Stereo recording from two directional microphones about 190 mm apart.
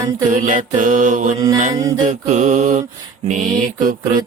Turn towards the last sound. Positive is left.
turn(degrees=-45)  # may be behind; listen again after turning